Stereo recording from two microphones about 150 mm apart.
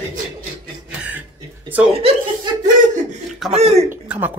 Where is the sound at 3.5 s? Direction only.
45° right (ahead or behind).